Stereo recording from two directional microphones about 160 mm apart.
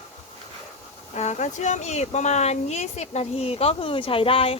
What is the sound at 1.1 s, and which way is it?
Speech, 45° left (ahead or behind).